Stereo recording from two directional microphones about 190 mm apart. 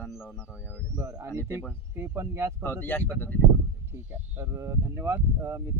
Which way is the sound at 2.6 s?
10° left (ahead or behind).